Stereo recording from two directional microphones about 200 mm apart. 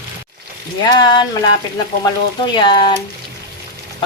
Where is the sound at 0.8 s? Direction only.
20° left (ahead or behind).